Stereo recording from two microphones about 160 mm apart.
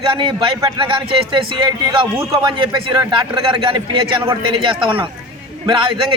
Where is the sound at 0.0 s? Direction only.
30° right (ahead or behind).